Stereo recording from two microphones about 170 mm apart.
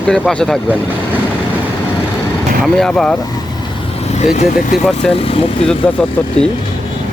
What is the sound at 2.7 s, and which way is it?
Speech, 5° left (ahead or behind).